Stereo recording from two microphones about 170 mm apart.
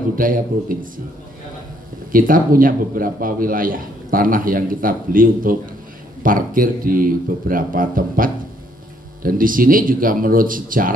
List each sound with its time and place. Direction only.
0.1 s a man's voice: 55° right (ahead or behind)
2.1 s a man's voice: 55° right (ahead or behind)